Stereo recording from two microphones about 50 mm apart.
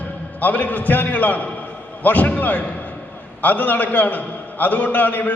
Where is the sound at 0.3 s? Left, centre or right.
Left.